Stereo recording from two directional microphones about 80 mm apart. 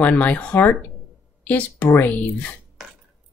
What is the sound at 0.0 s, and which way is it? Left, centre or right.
Speech, centre.